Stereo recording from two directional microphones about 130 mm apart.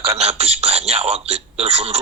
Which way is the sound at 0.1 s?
50° right (ahead or behind).